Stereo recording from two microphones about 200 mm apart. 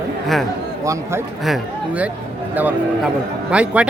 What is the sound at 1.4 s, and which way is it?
Speech, 5° right (ahead or behind).